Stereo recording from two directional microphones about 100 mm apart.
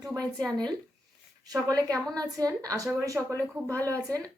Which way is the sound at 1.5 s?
40° right (ahead or behind).